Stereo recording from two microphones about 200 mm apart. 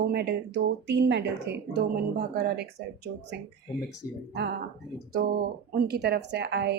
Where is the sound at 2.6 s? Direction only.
55° right (ahead or behind).